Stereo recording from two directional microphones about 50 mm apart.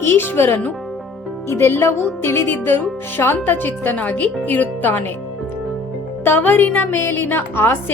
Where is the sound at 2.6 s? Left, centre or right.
Left.